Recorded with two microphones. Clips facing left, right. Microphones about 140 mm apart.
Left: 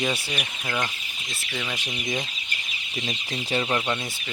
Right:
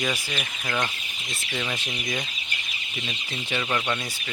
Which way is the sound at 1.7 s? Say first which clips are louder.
Left 1 dB; 20° left (ahead or behind).